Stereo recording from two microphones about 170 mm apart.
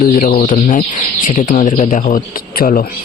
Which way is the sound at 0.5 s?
45° left (ahead or behind).